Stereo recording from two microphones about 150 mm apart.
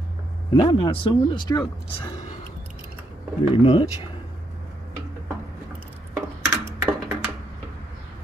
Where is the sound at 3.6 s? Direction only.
35° left (ahead or behind).